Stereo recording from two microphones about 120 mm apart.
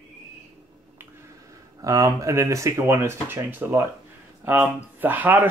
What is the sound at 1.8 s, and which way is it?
Speech, 25° right (ahead or behind).